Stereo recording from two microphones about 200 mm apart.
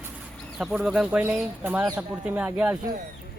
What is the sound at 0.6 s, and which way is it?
Speech, 5° right (ahead or behind).